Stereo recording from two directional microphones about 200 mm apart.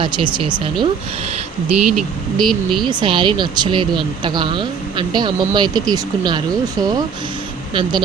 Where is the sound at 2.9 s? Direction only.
25° right (ahead or behind).